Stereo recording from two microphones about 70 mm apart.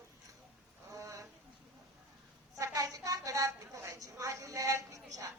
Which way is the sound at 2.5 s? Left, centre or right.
Right.